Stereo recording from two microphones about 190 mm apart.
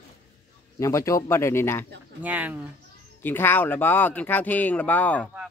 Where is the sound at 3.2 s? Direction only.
10° left (ahead or behind).